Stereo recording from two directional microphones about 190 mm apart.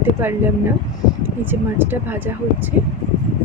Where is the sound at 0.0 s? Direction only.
10° right (ahead or behind).